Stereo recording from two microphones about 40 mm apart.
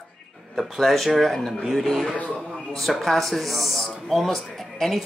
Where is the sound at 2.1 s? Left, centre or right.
Left.